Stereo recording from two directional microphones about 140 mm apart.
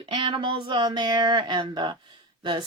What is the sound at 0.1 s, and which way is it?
Speech, 35° right (ahead or behind).